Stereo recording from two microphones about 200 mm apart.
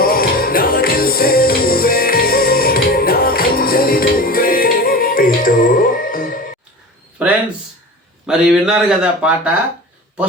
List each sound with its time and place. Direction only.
0.0 s music: 45° left (ahead or behind)
8.3 s speech: 5° right (ahead or behind)